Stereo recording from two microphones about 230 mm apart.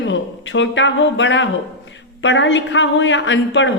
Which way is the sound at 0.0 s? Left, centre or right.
Left.